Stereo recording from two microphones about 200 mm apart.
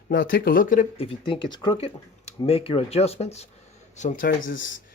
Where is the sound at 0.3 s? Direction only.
45° left (ahead or behind).